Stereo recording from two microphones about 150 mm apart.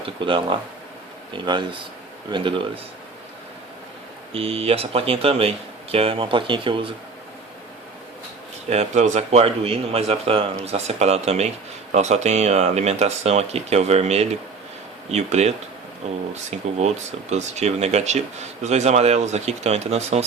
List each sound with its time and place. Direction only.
0.2 s speech: 35° right (ahead or behind)
4.4 s speech: 40° right (ahead or behind)
8.7 s speech: 50° right (ahead or behind)